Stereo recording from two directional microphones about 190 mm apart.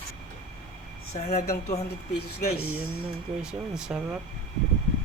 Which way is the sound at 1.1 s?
30° left (ahead or behind).